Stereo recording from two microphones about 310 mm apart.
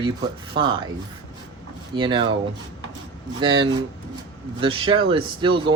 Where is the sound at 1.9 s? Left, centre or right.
Centre.